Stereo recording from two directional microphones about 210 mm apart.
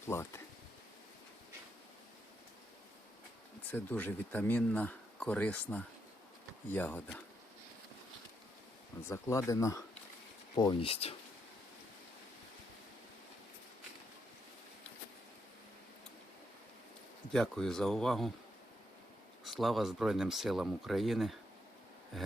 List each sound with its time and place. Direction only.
0.1 s speech: 10° left (ahead or behind)
3.7 s speech: 10° left (ahead or behind)
9.0 s speech: 15° left (ahead or behind)
17.3 s speech: centre (ahead or behind)
19.5 s speech: centre (ahead or behind)